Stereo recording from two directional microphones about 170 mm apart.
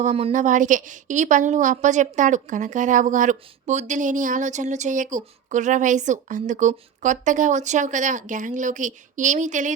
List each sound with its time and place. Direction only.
0.0 s a woman's voice: 40° right (ahead or behind)